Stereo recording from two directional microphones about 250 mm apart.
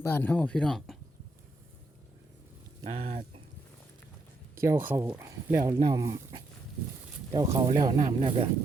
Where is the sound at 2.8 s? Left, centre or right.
Right.